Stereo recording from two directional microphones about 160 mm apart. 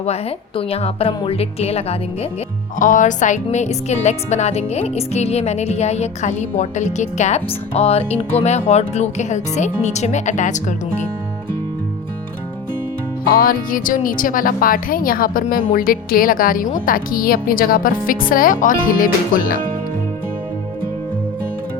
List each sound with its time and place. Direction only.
0.0 s speech: 40° left (ahead or behind)
2.7 s speech: 55° left (ahead or behind)
13.3 s speech: 60° left (ahead or behind)